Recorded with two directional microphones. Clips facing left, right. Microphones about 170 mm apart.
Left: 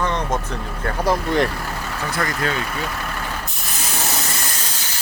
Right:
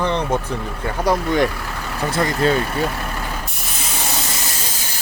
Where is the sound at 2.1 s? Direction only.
25° right (ahead or behind).